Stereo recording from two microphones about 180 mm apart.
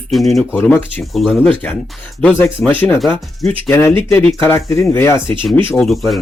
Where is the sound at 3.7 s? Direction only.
15° left (ahead or behind).